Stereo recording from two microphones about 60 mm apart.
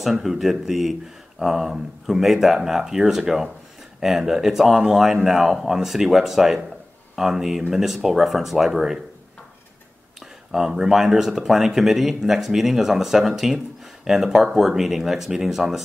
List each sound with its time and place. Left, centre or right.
0.0 s speech: centre
10.5 s speech: centre